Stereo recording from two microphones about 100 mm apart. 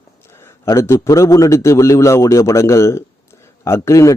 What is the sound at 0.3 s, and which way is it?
A man's voice, 30° left (ahead or behind).